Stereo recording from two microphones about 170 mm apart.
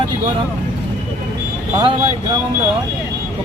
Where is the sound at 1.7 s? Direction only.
25° right (ahead or behind).